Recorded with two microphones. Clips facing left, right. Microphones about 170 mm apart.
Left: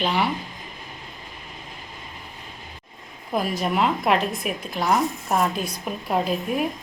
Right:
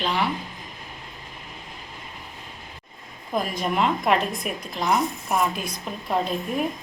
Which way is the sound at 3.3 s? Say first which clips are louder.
Left 1 dB; 5° left (ahead or behind).